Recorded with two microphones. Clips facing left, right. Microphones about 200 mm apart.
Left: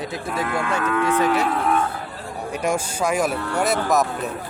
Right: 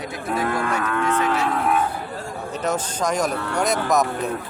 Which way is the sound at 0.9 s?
5° left (ahead or behind).